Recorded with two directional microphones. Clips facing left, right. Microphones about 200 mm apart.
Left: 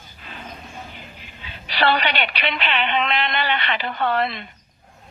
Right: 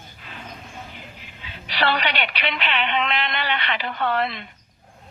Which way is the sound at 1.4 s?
30° left (ahead or behind).